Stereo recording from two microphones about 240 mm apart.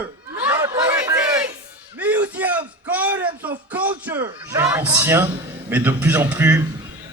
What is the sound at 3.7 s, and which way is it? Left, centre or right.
A man's voice, centre.